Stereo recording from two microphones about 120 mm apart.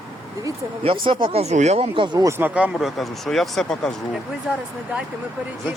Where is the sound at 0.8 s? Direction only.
45° right (ahead or behind); by 1.9 s 70° right (ahead or behind).